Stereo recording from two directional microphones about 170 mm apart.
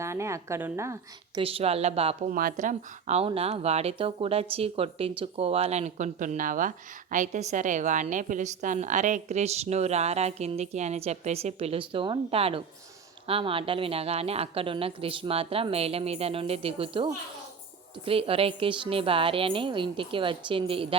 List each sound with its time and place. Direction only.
0.0 s a woman's voice: 15° right (ahead or behind)
1.4 s speech: 35° right (ahead or behind)
2.3 s speech: 55° right (ahead or behind); by 20.8 s 30° right (ahead or behind)